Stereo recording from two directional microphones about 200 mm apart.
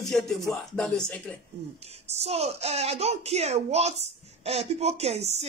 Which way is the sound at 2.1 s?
30° right (ahead or behind).